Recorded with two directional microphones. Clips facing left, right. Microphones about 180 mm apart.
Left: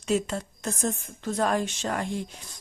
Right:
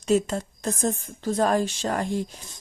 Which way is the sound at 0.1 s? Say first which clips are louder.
Right 4 dB; 40° right (ahead or behind).